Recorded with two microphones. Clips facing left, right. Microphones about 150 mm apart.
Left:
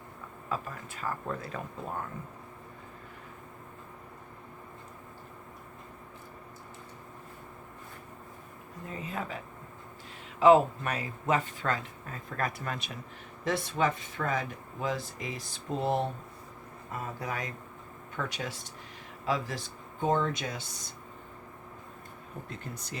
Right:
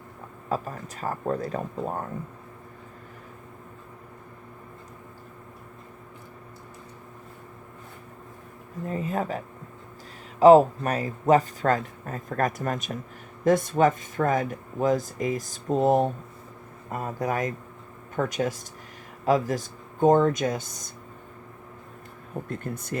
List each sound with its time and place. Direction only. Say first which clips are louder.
0.4 s speech: right 6 dB; 40° right (ahead or behind)
8.9 s speech: right 9 dB; 45° right (ahead or behind)
10.4 s speech: right 6 dB; 40° right (ahead or behind)
22.4 s speech: right 10 dB; 50° right (ahead or behind)